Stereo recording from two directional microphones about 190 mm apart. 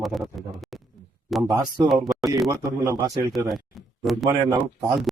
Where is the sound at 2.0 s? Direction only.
Centre (ahead or behind).